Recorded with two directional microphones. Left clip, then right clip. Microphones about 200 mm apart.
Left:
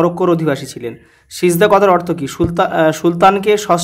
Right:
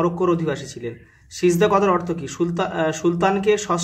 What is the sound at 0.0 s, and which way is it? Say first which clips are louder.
Speech: left 7 dB; 45° left (ahead or behind).